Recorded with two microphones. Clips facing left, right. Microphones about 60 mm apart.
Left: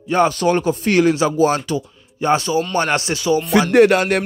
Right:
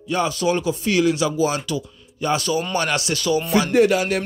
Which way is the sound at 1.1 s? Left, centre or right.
Left.